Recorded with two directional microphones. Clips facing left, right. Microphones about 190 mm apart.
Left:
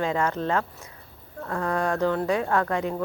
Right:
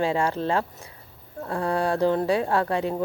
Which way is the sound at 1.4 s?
30° right (ahead or behind).